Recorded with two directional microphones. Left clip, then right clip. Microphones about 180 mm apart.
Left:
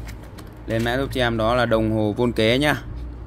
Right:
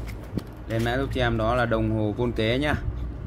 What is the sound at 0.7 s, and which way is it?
Speech, 50° left (ahead or behind).